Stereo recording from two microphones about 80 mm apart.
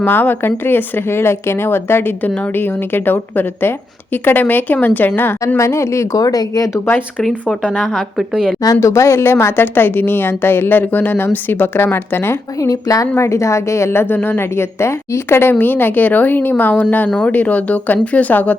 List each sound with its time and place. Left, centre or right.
0.0 s speech: left
5.5 s a woman's voice: left
6.7 s speech: left
7.6 s a woman's voice: centre
7.9 s a woman's voice: centre
8.6 s speech: left
12.5 s a woman's voice: left; by 18.5 s centre